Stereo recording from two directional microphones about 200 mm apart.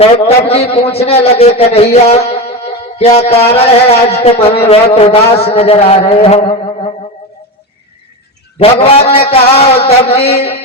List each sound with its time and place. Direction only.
0.0 s a man's voice: 30° left (ahead or behind)
8.5 s a man's voice: 30° left (ahead or behind)